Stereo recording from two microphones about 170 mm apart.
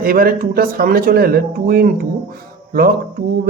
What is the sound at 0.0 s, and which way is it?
Speech, 60° right (ahead or behind).